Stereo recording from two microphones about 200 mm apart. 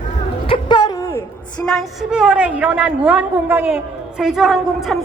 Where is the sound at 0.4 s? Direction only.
25° left (ahead or behind).